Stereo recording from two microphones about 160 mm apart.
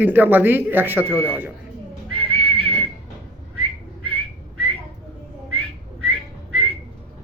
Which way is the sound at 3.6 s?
35° right (ahead or behind).